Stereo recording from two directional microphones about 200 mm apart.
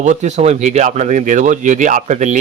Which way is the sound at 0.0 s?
35° right (ahead or behind).